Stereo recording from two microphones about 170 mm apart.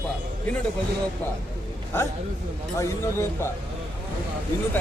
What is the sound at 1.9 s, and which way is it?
Speech, 15° left (ahead or behind).